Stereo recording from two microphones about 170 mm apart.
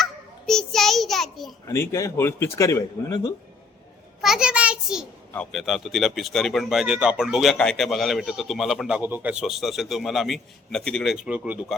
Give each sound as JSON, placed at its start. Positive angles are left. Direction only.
{"t": 0.0, "sound": "a sound", "side_deg": 5}
{"t": 1.6, "sound": "speech", "side_deg": 20}
{"t": 4.2, "sound": "a child's voice", "side_deg": -5}